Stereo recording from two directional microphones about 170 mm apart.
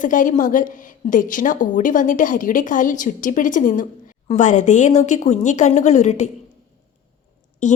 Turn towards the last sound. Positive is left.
turn(degrees=45)  # may be behind; listen again after turning